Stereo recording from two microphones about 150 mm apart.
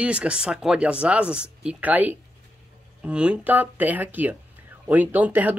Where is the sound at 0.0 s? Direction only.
5° right (ahead or behind).